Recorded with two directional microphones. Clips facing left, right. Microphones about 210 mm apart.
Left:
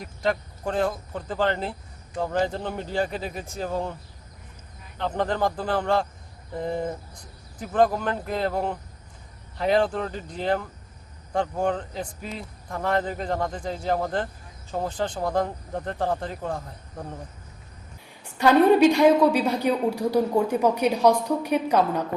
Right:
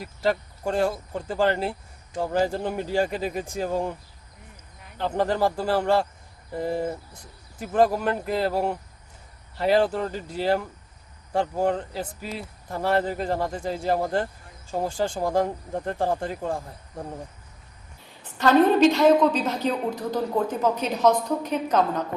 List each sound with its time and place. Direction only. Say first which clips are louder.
0.0 s speech: right 1 dB; 5° right (ahead or behind)
4.9 s speech: right 2 dB; 10° right (ahead or behind)
18.2 s a woman's voice: even; 10° left (ahead or behind)